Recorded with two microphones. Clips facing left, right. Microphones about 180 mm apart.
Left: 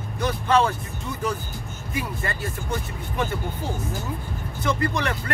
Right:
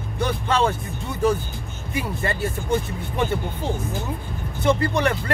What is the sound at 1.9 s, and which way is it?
Speech, 30° right (ahead or behind).